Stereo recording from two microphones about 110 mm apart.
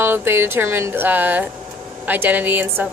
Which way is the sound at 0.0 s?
20° right (ahead or behind).